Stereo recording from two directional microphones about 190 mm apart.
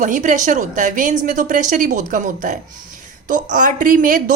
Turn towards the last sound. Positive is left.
turn(degrees=-45)  # may be behind; listen again after turning